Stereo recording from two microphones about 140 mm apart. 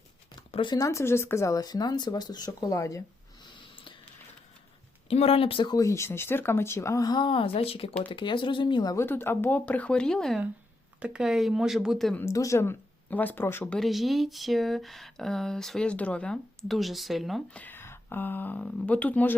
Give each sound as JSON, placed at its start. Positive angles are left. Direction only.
{"t": 0.5, "sound": "speech", "side_deg": 35}
{"t": 0.8, "sound": "speech", "side_deg": 20}
{"t": 5.0, "sound": "speech", "side_deg": 45}
{"t": 5.7, "sound": "speech", "side_deg": 20}
{"t": 9.0, "sound": "speech", "side_deg": 15}
{"t": 12.2, "sound": "speech", "side_deg": 20}
{"t": 13.7, "sound": "speech", "side_deg": 0}
{"t": 17.6, "sound": "speech", "side_deg": 15}